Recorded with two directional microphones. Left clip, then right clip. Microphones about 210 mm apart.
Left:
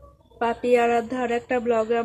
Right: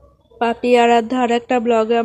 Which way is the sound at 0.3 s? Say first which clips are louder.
Right 6 dB; 25° right (ahead or behind).